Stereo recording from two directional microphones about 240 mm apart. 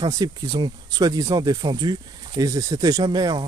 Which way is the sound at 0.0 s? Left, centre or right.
Centre.